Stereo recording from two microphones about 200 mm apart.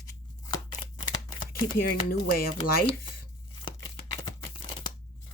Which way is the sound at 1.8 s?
50° left (ahead or behind).